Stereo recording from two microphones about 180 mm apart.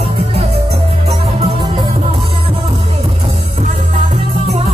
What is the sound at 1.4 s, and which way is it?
Music, 25° right (ahead or behind).